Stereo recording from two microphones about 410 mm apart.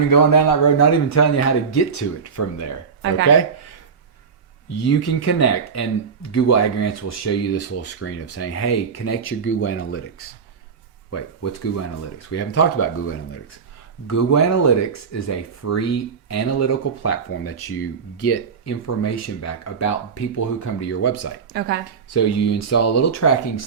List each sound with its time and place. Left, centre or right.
0.1 s speech: left
4.8 s speech: left
12.3 s speech: left
21.5 s speech: right
22.1 s speech: left